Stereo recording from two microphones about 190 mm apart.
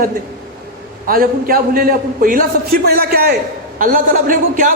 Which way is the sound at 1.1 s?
50° right (ahead or behind).